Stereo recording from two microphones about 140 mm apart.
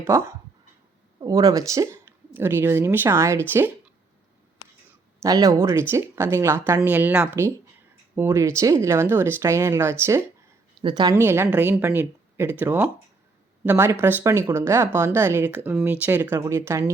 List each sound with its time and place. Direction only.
0.0 s speech: 20° right (ahead or behind)
5.2 s speech: 25° right (ahead or behind)
10.8 s a woman's voice: 30° right (ahead or behind)
11.2 s speech: 15° right (ahead or behind)
13.7 s speech: 15° right (ahead or behind)